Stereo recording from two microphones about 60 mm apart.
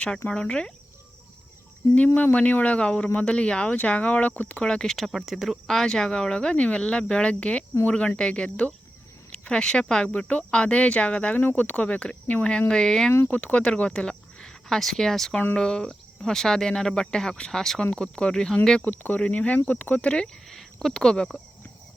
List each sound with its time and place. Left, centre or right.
0.3 s speech: centre
2.1 s speech: left; by 13.1 s centre
13.2 s speech: centre
18.8 s speech: left
20.5 s speech: centre